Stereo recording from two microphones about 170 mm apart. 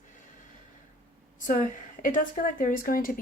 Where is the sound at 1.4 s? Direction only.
50° left (ahead or behind).